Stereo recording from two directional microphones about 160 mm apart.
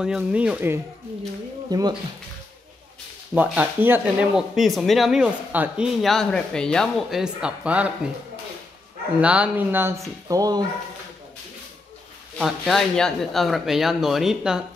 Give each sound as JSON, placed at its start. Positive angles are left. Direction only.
{"t": 0.0, "sound": "speech", "side_deg": -5}
{"t": 1.7, "sound": "speech", "side_deg": -25}
{"t": 3.3, "sound": "speech", "side_deg": -10}
{"t": 9.2, "sound": "speech", "side_deg": -5}
{"t": 12.4, "sound": "speech", "side_deg": 0}